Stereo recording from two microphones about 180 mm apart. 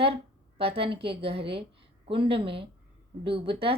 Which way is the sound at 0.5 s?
30° right (ahead or behind).